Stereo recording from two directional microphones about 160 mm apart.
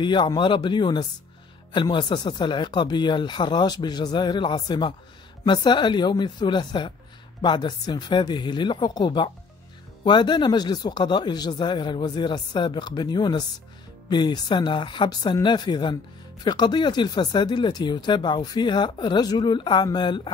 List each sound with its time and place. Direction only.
0.0 s speech: 30° left (ahead or behind)